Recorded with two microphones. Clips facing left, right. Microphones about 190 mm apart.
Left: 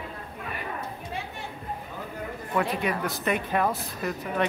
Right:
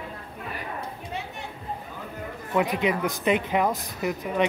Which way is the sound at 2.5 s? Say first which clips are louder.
Right 3 dB; 20° right (ahead or behind).